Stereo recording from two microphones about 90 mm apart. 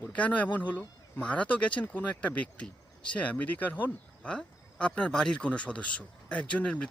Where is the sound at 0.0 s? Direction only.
15° left (ahead or behind).